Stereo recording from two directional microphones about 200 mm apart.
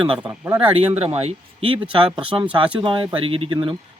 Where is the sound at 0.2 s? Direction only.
10° right (ahead or behind).